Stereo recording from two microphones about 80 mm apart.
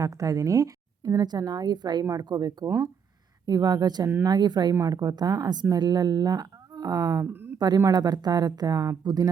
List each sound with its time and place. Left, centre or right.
0.0 s speech: right
1.2 s speech: right
2.6 s speech: right
3.4 s speech: right
4.7 s speech: right
7.3 s speech: right
7.9 s speech: right